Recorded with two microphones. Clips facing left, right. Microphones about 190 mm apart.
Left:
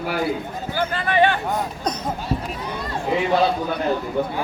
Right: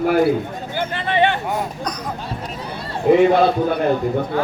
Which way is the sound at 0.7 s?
25° right (ahead or behind).